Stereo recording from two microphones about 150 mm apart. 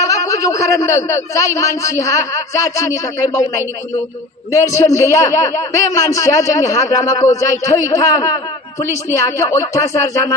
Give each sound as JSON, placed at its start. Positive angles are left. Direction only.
{"t": 0.0, "sound": "speech", "side_deg": 20}
{"t": 4.5, "sound": "speech", "side_deg": 20}